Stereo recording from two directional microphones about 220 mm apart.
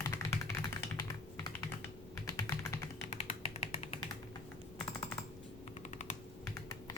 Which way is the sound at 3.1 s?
30° left (ahead or behind).